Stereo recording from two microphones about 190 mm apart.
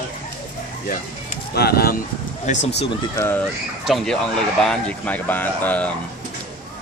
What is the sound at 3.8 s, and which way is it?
Speech, centre (ahead or behind).